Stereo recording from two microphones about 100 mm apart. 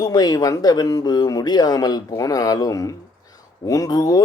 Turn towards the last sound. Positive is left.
turn(degrees=40)  # may be behind; listen again after turning